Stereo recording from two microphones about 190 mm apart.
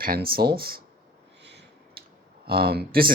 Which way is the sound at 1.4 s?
65° right (ahead or behind).